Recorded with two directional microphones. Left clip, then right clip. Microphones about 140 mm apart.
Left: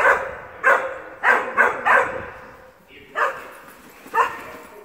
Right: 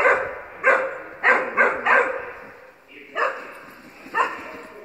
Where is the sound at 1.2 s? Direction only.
20° left (ahead or behind).